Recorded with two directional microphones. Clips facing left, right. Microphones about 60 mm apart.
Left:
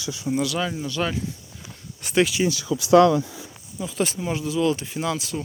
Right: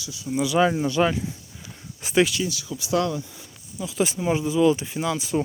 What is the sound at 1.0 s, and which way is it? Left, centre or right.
Speech, centre.